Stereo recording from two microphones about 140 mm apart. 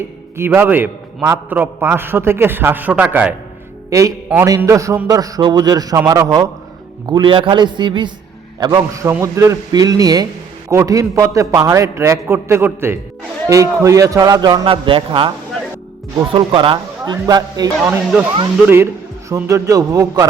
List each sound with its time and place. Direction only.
0.0 s a man's voice: 15° right (ahead or behind)
3.8 s a man's voice: 25° right (ahead or behind)
7.1 s a man's voice: 35° right (ahead or behind)
19.3 s a man's voice: 20° right (ahead or behind)